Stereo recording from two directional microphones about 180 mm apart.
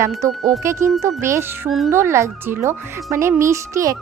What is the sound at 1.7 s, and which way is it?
Speech, centre (ahead or behind).